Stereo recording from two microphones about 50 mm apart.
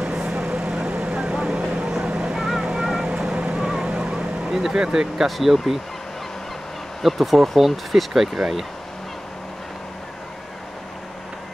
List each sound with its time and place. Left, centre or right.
0.0 s vehicle: centre
2.3 s vehicle: centre
4.7 s speech: centre
7.0 s speech: centre